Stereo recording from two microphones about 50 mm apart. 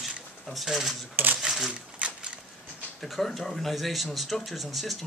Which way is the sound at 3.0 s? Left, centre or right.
Centre.